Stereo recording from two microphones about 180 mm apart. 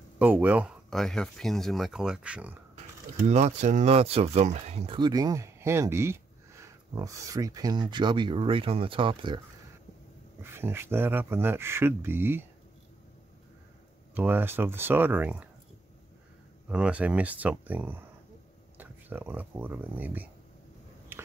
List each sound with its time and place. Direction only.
0.2 s speech: 10° right (ahead or behind)
3.2 s speech: 40° right (ahead or behind)
10.4 s speech: 15° right (ahead or behind)
14.1 s speech: 10° right (ahead or behind)
16.6 s speech: 5° right (ahead or behind)
21.1 s a sound: 10° right (ahead or behind)